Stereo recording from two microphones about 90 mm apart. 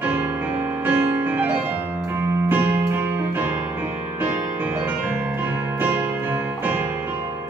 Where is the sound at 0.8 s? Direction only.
20° right (ahead or behind).